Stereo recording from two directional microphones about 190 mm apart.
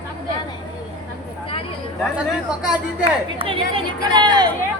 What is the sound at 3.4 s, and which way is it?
Speech, 30° right (ahead or behind).